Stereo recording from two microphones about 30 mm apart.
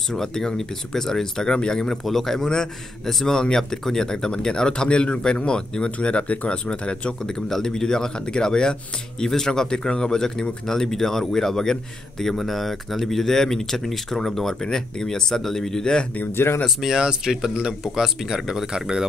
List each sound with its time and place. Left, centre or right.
0.1 s speech: centre
1.5 s speech: left
2.0 s speech: centre; by 5.9 s left
6.2 s speech: left
6.5 s speech: left; by 9.7 s centre
9.7 s speech: left
10.7 s speech: centre
15.8 s speech: left
16.6 s speech: centre
18.7 s speech: right